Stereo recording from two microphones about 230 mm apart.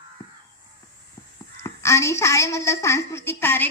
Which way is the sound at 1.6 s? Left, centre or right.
Centre.